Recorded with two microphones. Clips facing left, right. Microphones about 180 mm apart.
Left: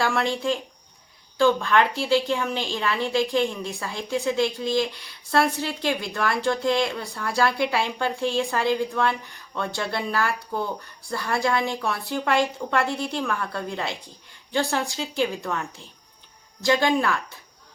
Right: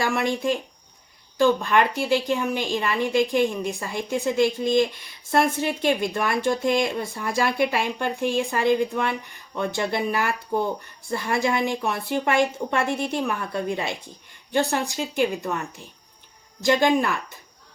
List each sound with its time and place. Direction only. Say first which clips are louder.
0.0 s a woman's voice: even; 15° right (ahead or behind)
1.4 s a woman's voice: even; 15° right (ahead or behind)
16.6 s a woman's voice: right 1 dB; 20° right (ahead or behind)